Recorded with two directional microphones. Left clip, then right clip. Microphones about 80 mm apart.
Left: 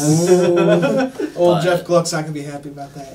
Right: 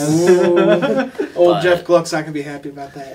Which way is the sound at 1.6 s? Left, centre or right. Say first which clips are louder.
Right 2 dB; left.